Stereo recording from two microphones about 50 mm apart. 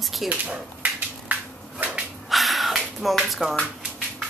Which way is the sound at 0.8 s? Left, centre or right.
Right.